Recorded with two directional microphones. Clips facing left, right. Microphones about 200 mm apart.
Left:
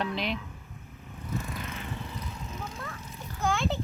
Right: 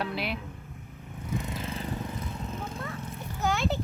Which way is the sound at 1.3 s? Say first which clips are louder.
Right 2 dB; 20° right (ahead or behind).